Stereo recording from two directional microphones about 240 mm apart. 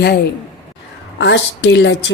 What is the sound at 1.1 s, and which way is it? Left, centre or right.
Speech, left.